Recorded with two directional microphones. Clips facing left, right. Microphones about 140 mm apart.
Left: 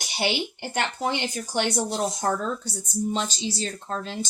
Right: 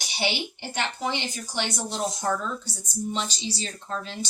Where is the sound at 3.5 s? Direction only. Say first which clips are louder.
Left 3 dB; 45° left (ahead or behind).